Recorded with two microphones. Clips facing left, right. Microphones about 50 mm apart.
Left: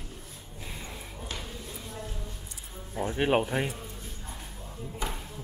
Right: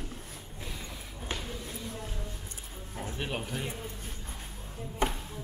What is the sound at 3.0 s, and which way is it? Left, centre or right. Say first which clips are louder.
Speech: left 11 dB; left.